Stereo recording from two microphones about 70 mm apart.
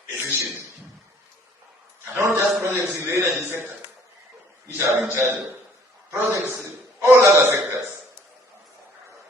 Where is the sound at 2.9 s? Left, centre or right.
Right.